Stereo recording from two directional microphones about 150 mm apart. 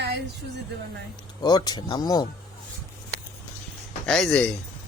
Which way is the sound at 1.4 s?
25° left (ahead or behind).